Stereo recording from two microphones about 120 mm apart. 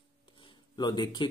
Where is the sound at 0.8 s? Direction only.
40° left (ahead or behind).